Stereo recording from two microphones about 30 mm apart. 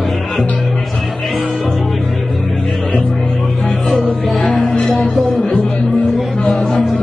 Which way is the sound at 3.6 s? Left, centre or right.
Centre.